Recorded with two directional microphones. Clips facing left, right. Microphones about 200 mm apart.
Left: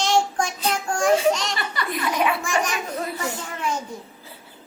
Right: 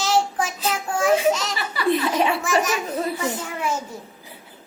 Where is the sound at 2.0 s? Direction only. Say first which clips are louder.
Right 2 dB; 30° right (ahead or behind).